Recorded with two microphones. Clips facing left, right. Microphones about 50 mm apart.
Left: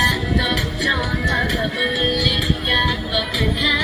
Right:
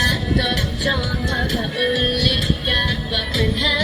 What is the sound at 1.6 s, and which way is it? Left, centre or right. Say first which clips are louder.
Music: even; centre.